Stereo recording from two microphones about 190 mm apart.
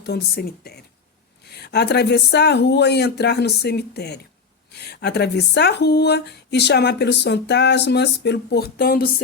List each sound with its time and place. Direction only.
0.0 s speech: 60° left (ahead or behind)